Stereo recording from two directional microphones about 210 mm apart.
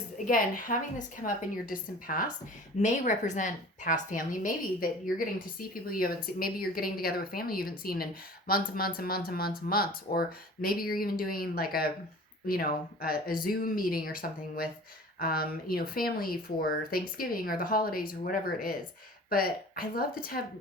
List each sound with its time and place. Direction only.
0.3 s a woman's voice: 40° left (ahead or behind)